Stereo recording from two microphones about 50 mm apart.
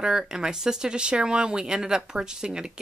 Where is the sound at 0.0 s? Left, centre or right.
Centre.